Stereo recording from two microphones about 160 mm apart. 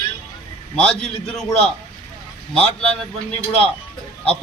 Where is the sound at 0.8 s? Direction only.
5° left (ahead or behind).